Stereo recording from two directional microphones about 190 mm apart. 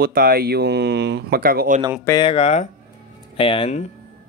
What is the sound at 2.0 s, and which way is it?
Speech, 25° left (ahead or behind).